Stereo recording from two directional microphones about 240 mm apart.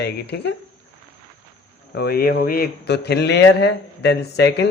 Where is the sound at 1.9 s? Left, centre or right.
Left.